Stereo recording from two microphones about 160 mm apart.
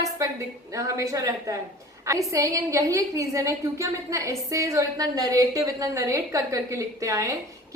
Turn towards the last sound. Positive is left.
turn(degrees=-20)  # may be behind; listen again after turning